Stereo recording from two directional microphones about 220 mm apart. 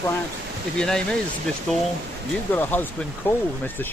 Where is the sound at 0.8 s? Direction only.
5° left (ahead or behind).